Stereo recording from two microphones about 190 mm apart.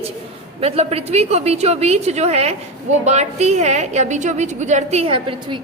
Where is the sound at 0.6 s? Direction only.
35° right (ahead or behind).